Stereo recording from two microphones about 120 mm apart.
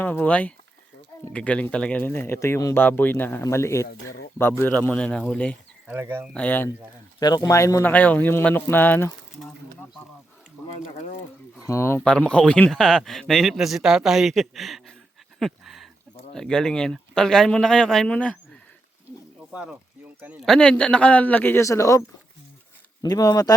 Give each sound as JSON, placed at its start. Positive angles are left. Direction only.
{"t": 0.0, "sound": "a man's voice", "side_deg": 15}
{"t": 5.9, "sound": "speech", "side_deg": -15}
{"t": 6.3, "sound": "a man's voice", "side_deg": 10}
{"t": 7.2, "sound": "speech", "side_deg": 35}
{"t": 10.8, "sound": "speech", "side_deg": 80}
{"t": 11.6, "sound": "speech", "side_deg": 25}
{"t": 12.0, "sound": "a man's voice", "side_deg": 5}
{"t": 15.4, "sound": "a sound", "side_deg": 0}
{"t": 16.3, "sound": "a man's voice", "side_deg": 5}
{"t": 20.4, "sound": "a man's voice", "side_deg": 5}
{"t": 23.0, "sound": "speech", "side_deg": 30}